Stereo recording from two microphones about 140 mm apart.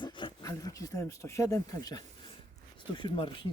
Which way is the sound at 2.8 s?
35° left (ahead or behind).